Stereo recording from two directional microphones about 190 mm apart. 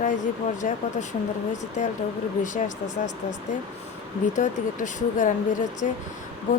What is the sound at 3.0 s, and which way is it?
Speech, 45° left (ahead or behind).